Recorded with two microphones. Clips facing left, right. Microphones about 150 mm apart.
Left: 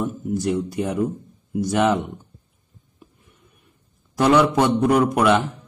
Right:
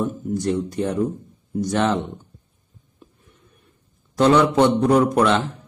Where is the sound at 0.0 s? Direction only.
10° left (ahead or behind).